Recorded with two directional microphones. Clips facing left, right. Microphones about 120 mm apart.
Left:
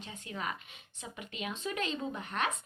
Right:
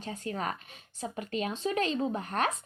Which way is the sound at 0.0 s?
40° right (ahead or behind).